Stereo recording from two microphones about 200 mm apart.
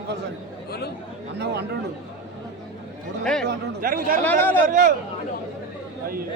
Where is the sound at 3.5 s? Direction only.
45° right (ahead or behind).